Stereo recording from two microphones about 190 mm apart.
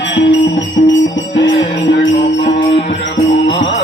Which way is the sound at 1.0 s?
70° left (ahead or behind).